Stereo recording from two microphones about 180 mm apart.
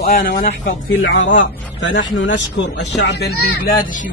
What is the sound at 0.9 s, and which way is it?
Speech, 90° left.